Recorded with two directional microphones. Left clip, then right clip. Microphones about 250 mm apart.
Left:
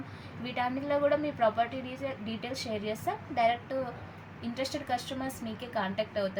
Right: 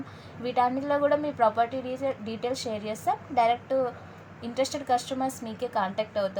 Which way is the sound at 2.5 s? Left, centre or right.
Centre.